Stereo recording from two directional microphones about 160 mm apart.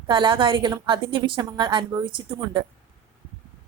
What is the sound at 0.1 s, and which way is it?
A woman's voice, 30° right (ahead or behind).